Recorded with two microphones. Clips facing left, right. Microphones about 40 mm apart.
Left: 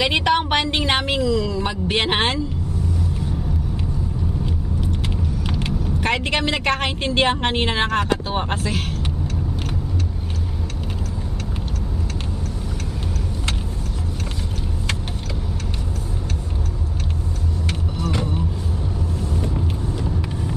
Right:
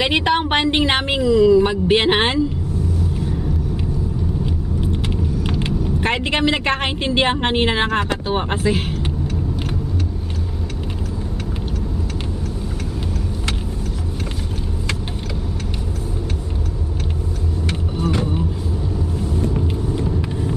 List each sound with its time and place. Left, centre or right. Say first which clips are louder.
0.0 s a woman's voice: right 1 dB; centre
5.0 s vehicle: right 3 dB; centre
5.7 s a woman's voice: even; right
8.7 s speech: right 3 dB; right
17.6 s vehicle: right 5 dB; right
18.1 s vehicle: right 1 dB; centre